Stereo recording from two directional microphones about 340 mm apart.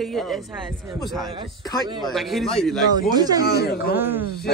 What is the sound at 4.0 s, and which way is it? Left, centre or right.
Speech, centre.